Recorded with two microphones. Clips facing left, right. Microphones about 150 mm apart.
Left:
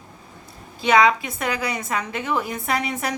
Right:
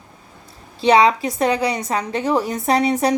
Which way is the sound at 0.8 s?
35° right (ahead or behind).